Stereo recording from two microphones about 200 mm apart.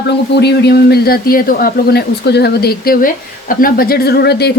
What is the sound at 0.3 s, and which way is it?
Speech, 55° left (ahead or behind).